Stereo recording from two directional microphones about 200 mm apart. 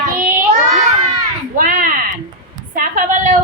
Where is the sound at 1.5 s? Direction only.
45° right (ahead or behind).